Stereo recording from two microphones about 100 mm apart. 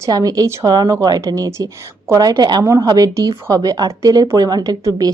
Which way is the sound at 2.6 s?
35° right (ahead or behind).